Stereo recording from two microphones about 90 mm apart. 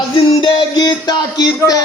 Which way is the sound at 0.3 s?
55° left (ahead or behind).